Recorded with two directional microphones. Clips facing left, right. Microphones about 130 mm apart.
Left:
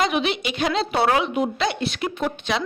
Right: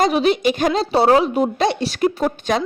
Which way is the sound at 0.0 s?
40° right (ahead or behind).